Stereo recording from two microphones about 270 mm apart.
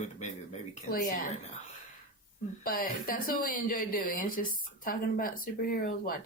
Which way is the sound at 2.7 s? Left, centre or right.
Left.